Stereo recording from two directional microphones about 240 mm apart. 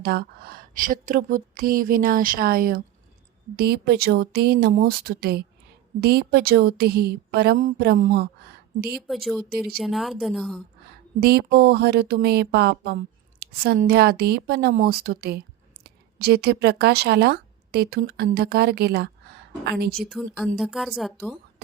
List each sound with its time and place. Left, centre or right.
0.0 s a woman's voice: right
9.0 s speech: centre
11.2 s a woman's voice: right
20.0 s speech: centre